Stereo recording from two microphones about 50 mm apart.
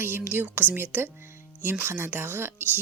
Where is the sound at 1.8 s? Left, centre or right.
Right.